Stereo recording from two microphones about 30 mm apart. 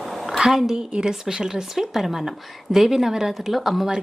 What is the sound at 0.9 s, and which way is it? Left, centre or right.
Speech, right.